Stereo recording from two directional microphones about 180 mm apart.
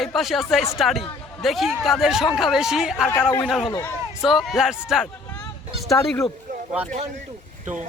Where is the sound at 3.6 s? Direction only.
20° left (ahead or behind).